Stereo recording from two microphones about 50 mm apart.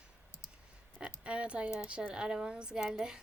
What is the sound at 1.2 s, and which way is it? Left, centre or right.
A woman's voice, right.